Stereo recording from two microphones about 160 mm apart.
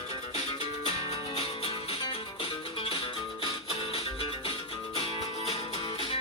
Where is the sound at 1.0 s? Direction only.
40° left (ahead or behind).